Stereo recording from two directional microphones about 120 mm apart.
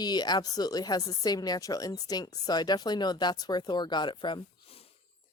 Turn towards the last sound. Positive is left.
turn(degrees=40)  # may be behind; listen again after turning